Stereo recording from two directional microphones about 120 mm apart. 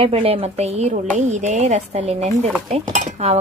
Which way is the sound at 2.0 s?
60° right (ahead or behind).